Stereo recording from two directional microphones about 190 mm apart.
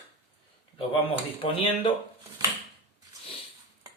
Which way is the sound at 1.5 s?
30° left (ahead or behind).